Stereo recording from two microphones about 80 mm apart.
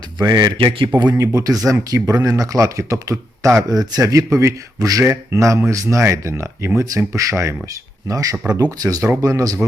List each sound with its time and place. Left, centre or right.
0.2 s speech: right
1.1 s speech: right